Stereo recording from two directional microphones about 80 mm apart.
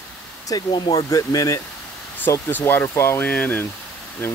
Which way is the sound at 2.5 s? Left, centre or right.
Left.